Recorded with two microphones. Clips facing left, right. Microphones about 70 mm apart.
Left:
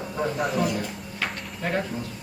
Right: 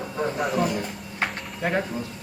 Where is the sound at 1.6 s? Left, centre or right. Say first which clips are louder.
Right 2 dB; centre.